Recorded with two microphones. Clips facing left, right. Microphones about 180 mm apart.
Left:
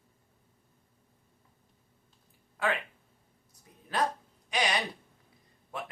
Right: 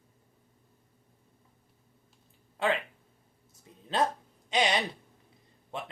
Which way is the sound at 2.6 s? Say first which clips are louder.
Right 2 dB; 25° right (ahead or behind).